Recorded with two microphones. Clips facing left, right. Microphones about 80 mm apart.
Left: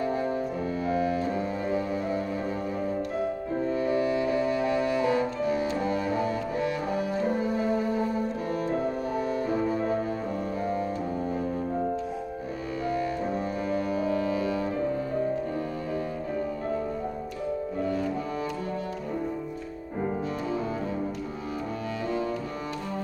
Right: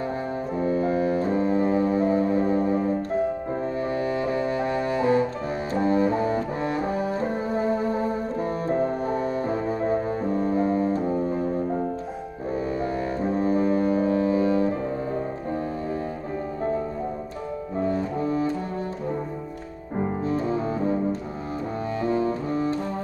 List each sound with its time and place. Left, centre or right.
0.7 s music: right
13.4 s music: right
17.8 s cello: right
20.2 s music: right
22.0 s music: right